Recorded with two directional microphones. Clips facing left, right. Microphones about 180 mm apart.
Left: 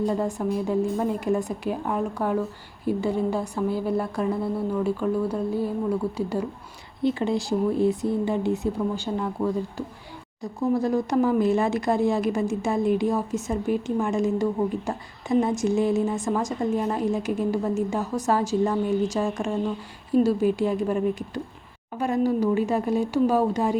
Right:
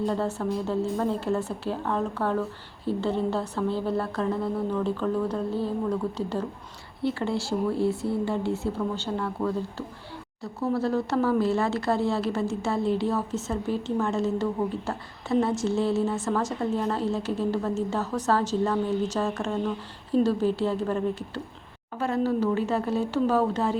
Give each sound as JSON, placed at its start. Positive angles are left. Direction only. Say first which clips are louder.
{"t": 0.0, "sound": "speech", "louder": "left 2 dB", "side_deg": 15}